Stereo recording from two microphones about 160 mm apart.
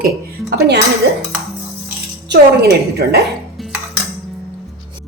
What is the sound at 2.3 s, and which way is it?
Speech, 85° right.